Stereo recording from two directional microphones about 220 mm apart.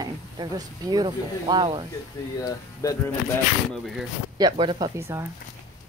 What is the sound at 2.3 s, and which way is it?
Speech, 15° left (ahead or behind).